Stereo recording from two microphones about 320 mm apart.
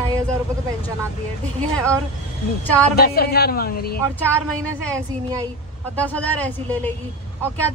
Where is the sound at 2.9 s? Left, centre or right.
Left.